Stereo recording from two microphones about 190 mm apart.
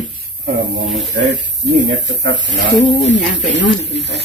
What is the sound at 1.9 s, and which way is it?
Speech, 70° right (ahead or behind).